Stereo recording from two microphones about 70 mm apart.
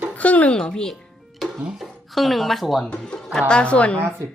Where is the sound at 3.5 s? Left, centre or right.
Centre.